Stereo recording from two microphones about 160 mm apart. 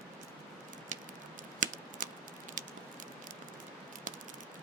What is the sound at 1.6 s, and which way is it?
Computer keyboard, 55° right (ahead or behind).